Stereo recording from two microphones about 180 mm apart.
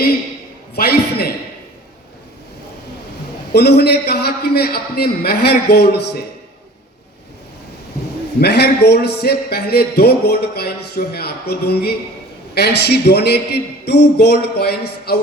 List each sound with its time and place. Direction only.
0.8 s a man's voice: 60° left (ahead or behind)
3.5 s a man's voice: 65° left (ahead or behind)
8.4 s a man's voice: 65° left (ahead or behind)